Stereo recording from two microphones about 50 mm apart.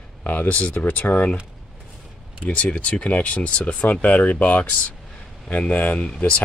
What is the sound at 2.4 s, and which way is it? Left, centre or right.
Speech, left.